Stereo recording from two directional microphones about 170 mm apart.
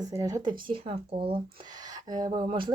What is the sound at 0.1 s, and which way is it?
Speech, 20° right (ahead or behind).